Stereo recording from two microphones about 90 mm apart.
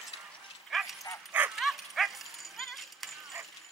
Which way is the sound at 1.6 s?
Centre (ahead or behind).